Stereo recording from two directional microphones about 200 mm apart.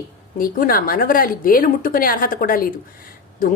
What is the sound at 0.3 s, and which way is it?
Speech, 45° left (ahead or behind).